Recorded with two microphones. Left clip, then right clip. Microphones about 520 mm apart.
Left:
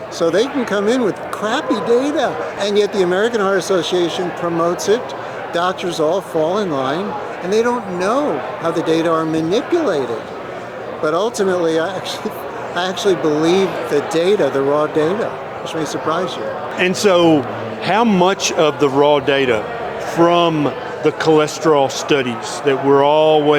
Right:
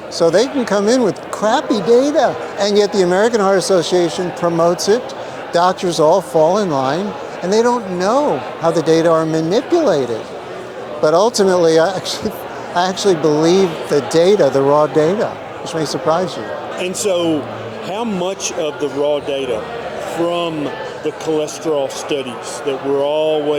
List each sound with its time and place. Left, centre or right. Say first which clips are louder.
0.2 s speech: right 3 dB; right
16.7 s speech: left 5 dB; left